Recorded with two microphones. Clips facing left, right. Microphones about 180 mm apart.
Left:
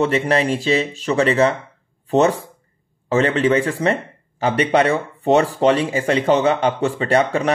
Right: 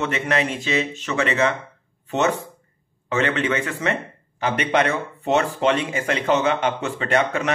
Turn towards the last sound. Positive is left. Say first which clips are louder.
# left 4 dB
turn(degrees=35)  # may be behind; listen again after turning